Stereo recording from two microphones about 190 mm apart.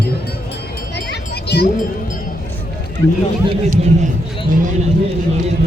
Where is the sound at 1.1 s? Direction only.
60° left (ahead or behind).